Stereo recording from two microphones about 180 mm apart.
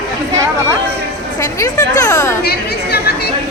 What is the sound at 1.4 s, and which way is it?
Speech, 20° left (ahead or behind).